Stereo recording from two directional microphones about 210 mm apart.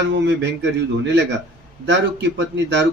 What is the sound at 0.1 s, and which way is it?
Speech, 60° right (ahead or behind).